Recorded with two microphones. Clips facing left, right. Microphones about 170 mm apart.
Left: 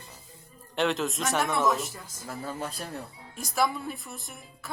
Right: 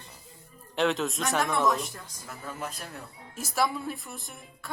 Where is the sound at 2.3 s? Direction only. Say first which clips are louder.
Left 3 dB; 30° left (ahead or behind).